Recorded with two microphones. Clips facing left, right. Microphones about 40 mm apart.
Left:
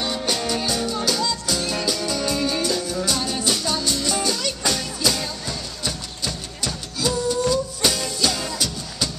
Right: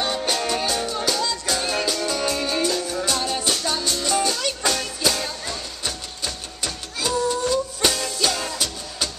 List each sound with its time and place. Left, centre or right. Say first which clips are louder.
0.0 s music: right 1 dB; centre